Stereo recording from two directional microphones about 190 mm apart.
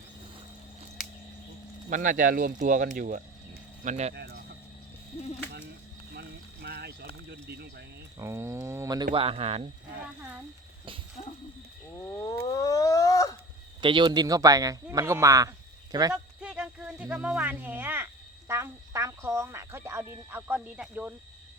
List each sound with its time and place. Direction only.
1.9 s speech: 45° right (ahead or behind)
4.1 s a sound: 60° right (ahead or behind)
6.1 s a sound: 60° right (ahead or behind)
7.3 s speech: 60° right (ahead or behind)
8.2 s speech: 15° right (ahead or behind)
9.1 s speech: 30° right (ahead or behind)
11.9 s wild animals: 15° left (ahead or behind)
13.8 s speech: 25° right (ahead or behind)
16.1 s a sound: 5° right (ahead or behind)
17.2 s speech: 5° right (ahead or behind)